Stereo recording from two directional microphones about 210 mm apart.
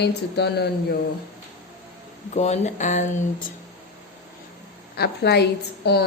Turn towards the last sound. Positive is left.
turn(degrees=50)  # may be behind; listen again after turning